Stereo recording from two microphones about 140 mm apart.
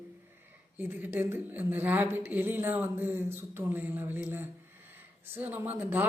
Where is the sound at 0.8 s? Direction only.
15° right (ahead or behind).